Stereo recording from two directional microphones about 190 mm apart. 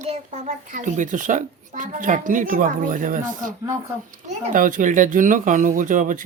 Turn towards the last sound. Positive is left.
turn(degrees=-45)  # may be behind; listen again after turning